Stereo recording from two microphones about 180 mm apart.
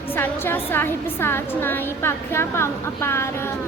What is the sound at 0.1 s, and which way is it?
A woman's voice, 10° left (ahead or behind).